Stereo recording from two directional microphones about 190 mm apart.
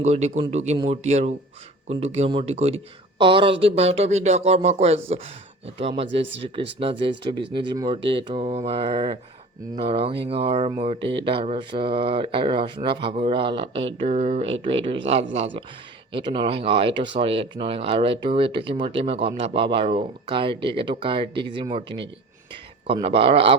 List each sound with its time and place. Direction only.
0.0 s speech: 35° right (ahead or behind)